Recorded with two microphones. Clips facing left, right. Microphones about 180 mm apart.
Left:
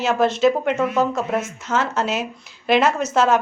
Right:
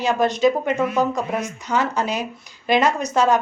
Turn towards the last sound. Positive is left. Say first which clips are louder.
# even
turn(degrees=5)  # may be behind; listen again after turning